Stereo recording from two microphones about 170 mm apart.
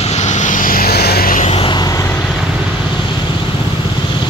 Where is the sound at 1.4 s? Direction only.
35° left (ahead or behind).